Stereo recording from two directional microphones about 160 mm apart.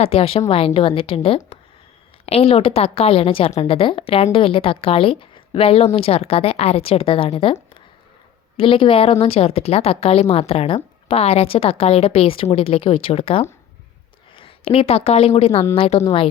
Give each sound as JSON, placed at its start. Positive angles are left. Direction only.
{"t": 0.0, "sound": "a woman's voice", "side_deg": 35}